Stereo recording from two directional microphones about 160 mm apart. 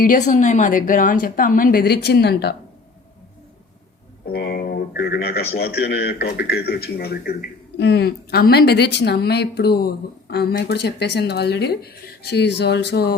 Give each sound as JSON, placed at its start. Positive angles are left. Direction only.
{"t": 0.0, "sound": "a woman's voice", "side_deg": 55}
{"t": 4.3, "sound": "a sound", "side_deg": 80}
{"t": 5.5, "sound": "a man's voice", "side_deg": 85}
{"t": 7.8, "sound": "speech", "side_deg": 90}